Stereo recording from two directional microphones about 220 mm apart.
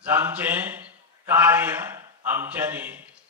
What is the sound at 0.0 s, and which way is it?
A man's voice, 10° right (ahead or behind).